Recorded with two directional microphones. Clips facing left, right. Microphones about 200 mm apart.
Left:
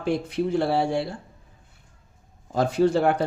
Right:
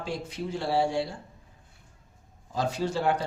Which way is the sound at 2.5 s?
55° left (ahead or behind).